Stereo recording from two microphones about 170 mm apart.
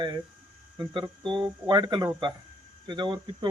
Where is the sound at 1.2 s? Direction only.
30° right (ahead or behind).